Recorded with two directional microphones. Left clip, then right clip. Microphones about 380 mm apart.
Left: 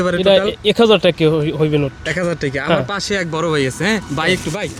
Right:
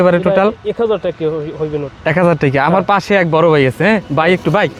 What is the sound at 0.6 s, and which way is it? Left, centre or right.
Speech, left.